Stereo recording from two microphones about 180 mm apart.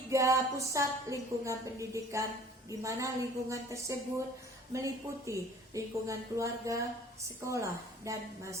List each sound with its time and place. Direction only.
0.1 s a woman's voice: 15° right (ahead or behind)